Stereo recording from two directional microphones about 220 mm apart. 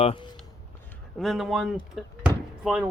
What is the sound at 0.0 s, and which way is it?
Speech, 25° left (ahead or behind).